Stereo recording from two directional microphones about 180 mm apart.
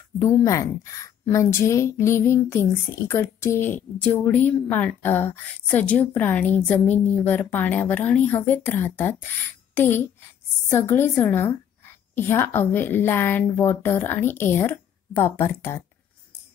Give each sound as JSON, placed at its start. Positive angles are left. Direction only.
{"t": 0.2, "sound": "a woman's voice", "side_deg": 15}